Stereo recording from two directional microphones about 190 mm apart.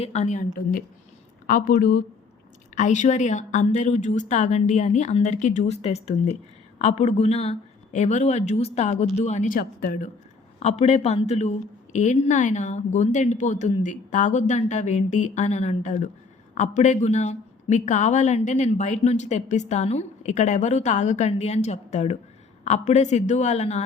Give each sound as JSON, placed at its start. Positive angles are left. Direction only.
{"t": 0.0, "sound": "a woman's voice", "side_deg": 35}
{"t": 10.6, "sound": "a woman's voice", "side_deg": 35}